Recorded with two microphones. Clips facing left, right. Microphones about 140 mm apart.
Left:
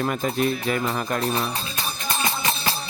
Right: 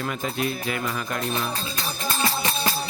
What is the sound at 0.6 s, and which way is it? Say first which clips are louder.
Speech: left 4 dB; 35° left (ahead or behind).